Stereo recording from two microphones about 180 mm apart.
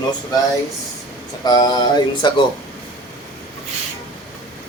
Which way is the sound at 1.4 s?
20° left (ahead or behind).